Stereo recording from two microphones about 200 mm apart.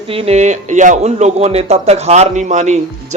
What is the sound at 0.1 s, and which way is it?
Speech, 30° right (ahead or behind).